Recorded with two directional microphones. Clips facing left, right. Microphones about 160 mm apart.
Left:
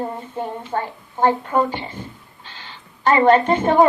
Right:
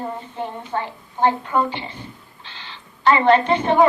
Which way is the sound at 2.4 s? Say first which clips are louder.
Left 1 dB; 45° left (ahead or behind).